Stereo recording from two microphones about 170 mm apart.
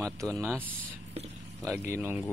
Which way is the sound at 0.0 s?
5° left (ahead or behind).